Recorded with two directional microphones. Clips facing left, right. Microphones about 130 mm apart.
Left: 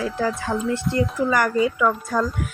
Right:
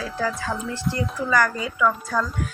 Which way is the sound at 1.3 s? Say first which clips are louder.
Left 1 dB; 25° left (ahead or behind).